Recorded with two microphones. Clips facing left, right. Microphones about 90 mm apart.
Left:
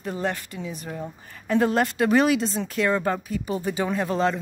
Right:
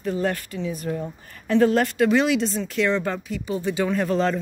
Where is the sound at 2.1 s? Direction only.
40° left (ahead or behind).